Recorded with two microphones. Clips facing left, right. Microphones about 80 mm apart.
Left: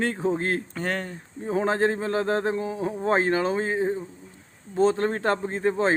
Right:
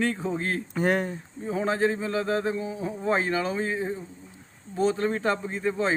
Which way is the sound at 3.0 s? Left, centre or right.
Left.